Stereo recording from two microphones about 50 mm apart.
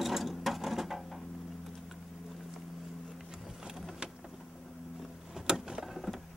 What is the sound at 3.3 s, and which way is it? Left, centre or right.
Vehicle, centre.